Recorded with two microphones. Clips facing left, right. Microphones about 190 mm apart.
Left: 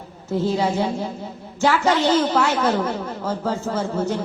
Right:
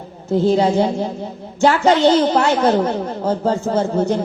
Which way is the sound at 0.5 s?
30° right (ahead or behind).